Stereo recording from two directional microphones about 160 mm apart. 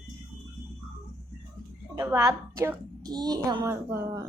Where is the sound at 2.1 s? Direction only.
20° right (ahead or behind).